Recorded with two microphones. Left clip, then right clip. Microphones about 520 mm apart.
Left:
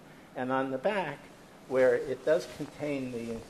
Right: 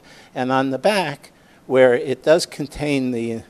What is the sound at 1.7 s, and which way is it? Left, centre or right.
Speech, right.